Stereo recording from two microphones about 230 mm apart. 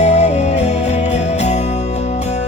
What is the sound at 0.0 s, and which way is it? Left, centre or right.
Music, left.